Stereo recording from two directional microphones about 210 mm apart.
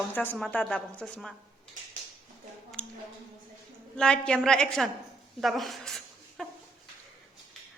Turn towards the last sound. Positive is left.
turn(degrees=0)  # may be behind; listen again after turning